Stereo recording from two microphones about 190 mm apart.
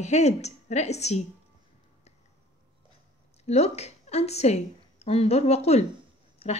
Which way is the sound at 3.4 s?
35° left (ahead or behind).